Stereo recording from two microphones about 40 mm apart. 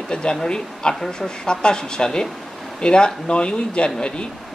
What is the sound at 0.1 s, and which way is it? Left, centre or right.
Speech, centre.